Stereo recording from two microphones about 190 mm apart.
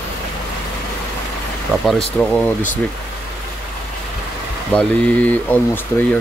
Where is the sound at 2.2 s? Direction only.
10° left (ahead or behind).